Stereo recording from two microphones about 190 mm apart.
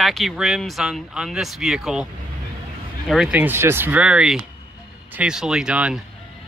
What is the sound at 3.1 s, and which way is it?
Speech, 5° right (ahead or behind).